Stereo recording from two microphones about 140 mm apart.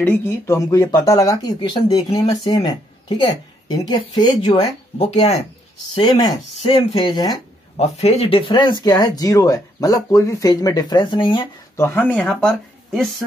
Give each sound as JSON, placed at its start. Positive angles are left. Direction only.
{"t": 0.0, "sound": "a woman's voice", "side_deg": 15}
{"t": 4.5, "sound": "speech", "side_deg": 50}
{"t": 5.9, "sound": "a woman's voice", "side_deg": 30}
{"t": 7.7, "sound": "speech", "side_deg": 50}
{"t": 11.7, "sound": "speech", "side_deg": 15}